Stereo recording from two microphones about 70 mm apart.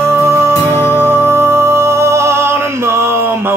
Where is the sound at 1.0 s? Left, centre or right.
Right.